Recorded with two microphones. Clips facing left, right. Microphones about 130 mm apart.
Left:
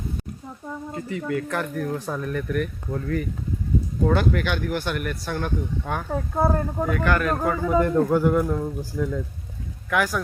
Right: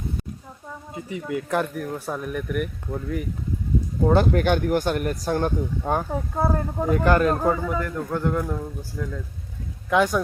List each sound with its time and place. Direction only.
0.9 s speech: 15° right (ahead or behind)
1.7 s speech: 5° right (ahead or behind)
4.0 s speech: 35° right (ahead or behind)
6.3 s speech: centre (ahead or behind)
6.9 s speech: 30° right (ahead or behind)
7.3 s speech: 15° right (ahead or behind)
7.7 s a man's voice: 30° left (ahead or behind)
8.1 s speech: 5° left (ahead or behind)
9.9 s speech: 25° right (ahead or behind)